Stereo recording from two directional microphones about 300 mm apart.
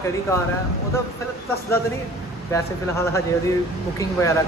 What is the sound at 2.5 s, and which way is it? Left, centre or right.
A man's voice, centre.